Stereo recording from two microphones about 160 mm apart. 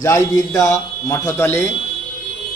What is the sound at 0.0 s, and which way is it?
A man's voice, 20° left (ahead or behind).